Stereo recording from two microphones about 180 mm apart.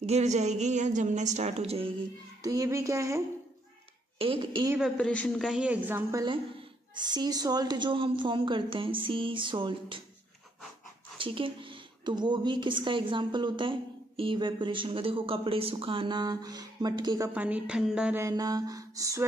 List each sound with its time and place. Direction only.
0.0 s speech: 35° right (ahead or behind)
2.4 s a sound: 20° right (ahead or behind)
4.2 s a woman's voice: 25° right (ahead or behind)
4.6 s a woman's voice: 5° right (ahead or behind)
4.9 s a woman's voice: 5° left (ahead or behind); by 6.2 s 10° right (ahead or behind)
7.0 s a woman's voice: 25° right (ahead or behind)
11.1 s a woman's voice: 30° right (ahead or behind)
17.3 s a sound: 10° right (ahead or behind)
18.2 s a woman's voice: 20° right (ahead or behind)